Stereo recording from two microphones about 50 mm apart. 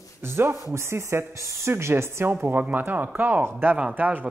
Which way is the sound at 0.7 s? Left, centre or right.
Right.